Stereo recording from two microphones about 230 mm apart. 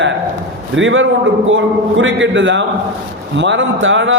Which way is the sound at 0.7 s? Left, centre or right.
Right.